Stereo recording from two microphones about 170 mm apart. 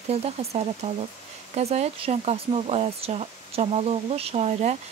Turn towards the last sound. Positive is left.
turn(degrees=-40)  # may be behind; listen again after turning